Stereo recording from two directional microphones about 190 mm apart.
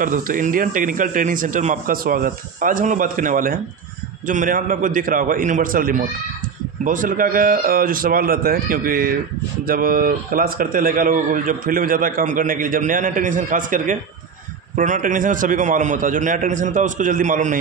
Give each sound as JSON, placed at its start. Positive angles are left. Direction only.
{"t": 0.0, "sound": "a man's voice", "side_deg": -45}